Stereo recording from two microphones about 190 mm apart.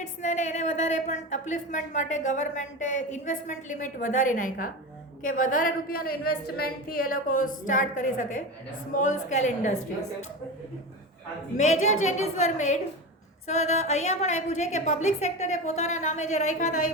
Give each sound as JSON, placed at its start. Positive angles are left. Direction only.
{"t": 0.0, "sound": "a woman's voice", "side_deg": 40}
{"t": 11.5, "sound": "speech", "side_deg": 40}